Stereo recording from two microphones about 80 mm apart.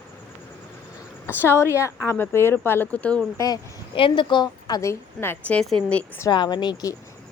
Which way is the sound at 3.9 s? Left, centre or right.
Left.